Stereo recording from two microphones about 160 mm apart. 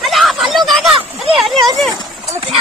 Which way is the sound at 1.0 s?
35° right (ahead or behind).